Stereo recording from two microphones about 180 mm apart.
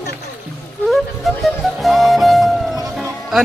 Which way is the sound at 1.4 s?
Centre (ahead or behind).